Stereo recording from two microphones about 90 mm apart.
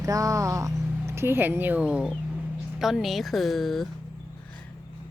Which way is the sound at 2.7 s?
5° right (ahead or behind).